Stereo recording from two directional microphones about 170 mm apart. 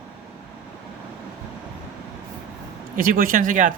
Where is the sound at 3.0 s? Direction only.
55° right (ahead or behind).